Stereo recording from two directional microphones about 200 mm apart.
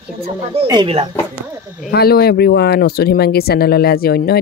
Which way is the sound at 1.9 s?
50° left (ahead or behind).